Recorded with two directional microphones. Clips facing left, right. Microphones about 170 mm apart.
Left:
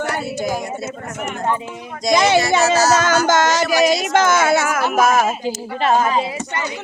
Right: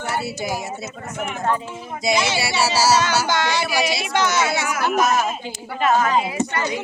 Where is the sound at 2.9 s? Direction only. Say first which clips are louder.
Left 4 dB; 45° left (ahead or behind).